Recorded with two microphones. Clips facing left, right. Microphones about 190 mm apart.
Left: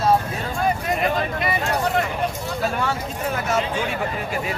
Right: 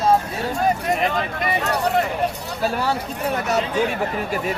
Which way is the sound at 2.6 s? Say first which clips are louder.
Right 3 dB; 35° right (ahead or behind).